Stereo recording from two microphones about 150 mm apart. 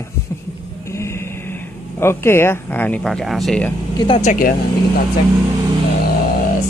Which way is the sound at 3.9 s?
30° left (ahead or behind).